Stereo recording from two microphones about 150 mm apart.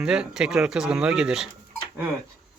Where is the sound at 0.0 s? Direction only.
5° right (ahead or behind).